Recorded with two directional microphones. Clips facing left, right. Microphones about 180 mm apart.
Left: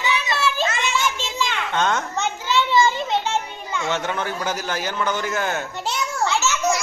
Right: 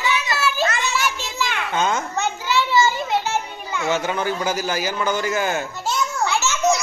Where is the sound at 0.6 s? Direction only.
25° left (ahead or behind).